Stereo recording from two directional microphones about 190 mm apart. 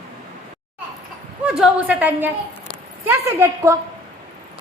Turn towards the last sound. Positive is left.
turn(degrees=-15)  # may be behind; listen again after turning